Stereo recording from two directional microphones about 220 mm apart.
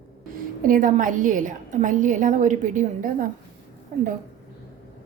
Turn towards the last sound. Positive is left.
turn(degrees=-35)  # may be behind; listen again after turning